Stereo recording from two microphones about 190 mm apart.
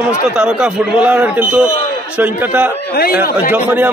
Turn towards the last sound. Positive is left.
turn(degrees=-10)  # may be behind; listen again after turning